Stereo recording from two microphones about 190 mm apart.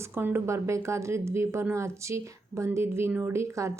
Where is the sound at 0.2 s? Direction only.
10° right (ahead or behind).